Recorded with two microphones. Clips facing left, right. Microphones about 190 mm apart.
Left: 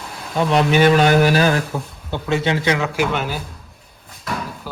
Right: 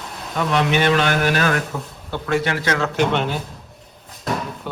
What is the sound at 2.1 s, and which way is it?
Speech, 25° left (ahead or behind).